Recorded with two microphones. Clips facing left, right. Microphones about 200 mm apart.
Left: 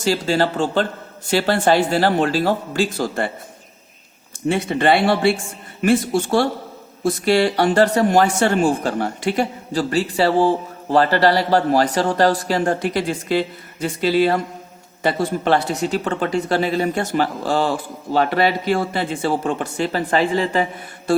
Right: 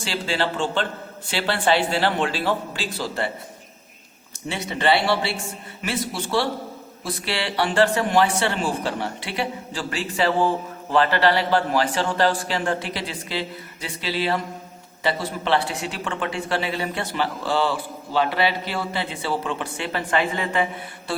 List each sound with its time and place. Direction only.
0.0 s speech: 40° left (ahead or behind)
4.4 s speech: 50° left (ahead or behind); by 20.7 s 35° left (ahead or behind)
21.1 s speech: 45° left (ahead or behind)